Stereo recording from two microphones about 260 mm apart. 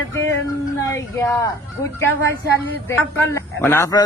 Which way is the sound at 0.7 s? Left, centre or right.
Centre.